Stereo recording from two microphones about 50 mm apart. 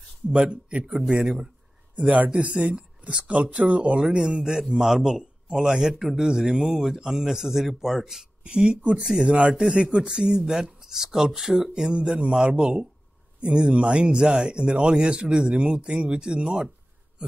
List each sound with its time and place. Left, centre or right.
0.3 s speech: right
0.9 s speech: centre
2.0 s speech: right; by 8.3 s centre
8.5 s speech: right